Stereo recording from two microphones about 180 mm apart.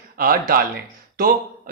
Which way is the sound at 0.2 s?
55° right (ahead or behind).